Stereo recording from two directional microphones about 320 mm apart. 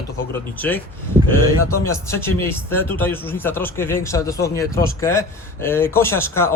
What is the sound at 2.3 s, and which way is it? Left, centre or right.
Speech, centre.